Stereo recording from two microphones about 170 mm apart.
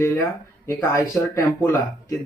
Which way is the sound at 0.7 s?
15° left (ahead or behind).